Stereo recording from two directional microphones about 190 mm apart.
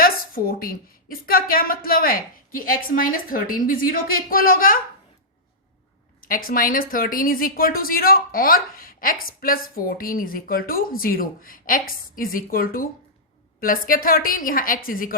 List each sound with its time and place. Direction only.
0.0 s speech: 50° left (ahead or behind)
6.2 s speech: 50° left (ahead or behind)